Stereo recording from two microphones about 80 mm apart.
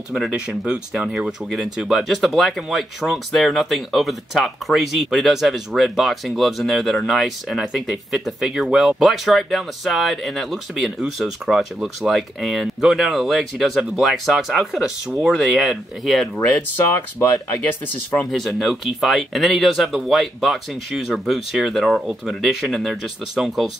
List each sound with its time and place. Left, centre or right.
0.5 s speech: centre
16.3 s speech: left
18.3 s speech: centre